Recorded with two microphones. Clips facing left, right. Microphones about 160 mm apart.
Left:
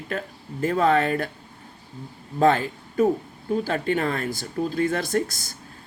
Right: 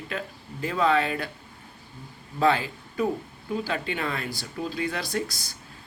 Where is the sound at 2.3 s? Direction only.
45° left (ahead or behind).